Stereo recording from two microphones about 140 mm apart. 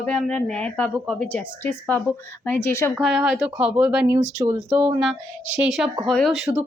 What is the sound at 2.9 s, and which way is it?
A woman's voice, 5° right (ahead or behind).